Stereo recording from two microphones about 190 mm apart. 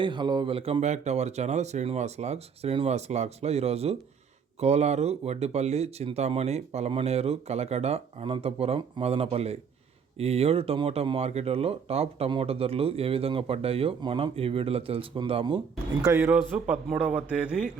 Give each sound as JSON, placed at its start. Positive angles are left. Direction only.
{"t": 0.0, "sound": "speech", "side_deg": -25}
{"t": 16.6, "sound": "a man's voice", "side_deg": -5}